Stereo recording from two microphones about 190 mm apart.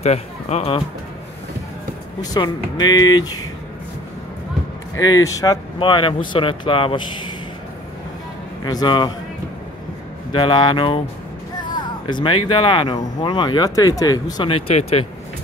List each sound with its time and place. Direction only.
0.0 s speech: 35° left (ahead or behind)
2.3 s speech: 20° left (ahead or behind)
4.9 s speech: 20° left (ahead or behind)
8.6 s speech: 20° left (ahead or behind)
10.3 s speech: 25° left (ahead or behind)